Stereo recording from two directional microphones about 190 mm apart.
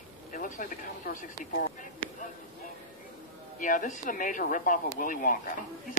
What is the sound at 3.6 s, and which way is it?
Speech, 45° left (ahead or behind).